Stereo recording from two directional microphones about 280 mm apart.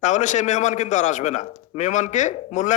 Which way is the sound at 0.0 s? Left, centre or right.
Left.